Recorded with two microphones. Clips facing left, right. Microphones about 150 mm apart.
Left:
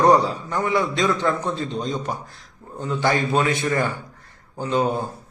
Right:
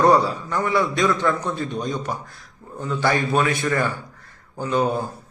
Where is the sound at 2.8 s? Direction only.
20° left (ahead or behind).